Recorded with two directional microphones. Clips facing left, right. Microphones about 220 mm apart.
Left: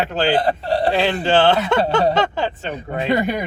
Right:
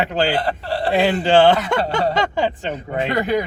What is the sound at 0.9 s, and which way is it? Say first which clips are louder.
Speech: right 5 dB; 15° right (ahead or behind).